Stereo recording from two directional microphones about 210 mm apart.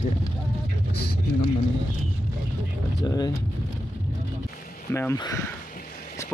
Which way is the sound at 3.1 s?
15° left (ahead or behind).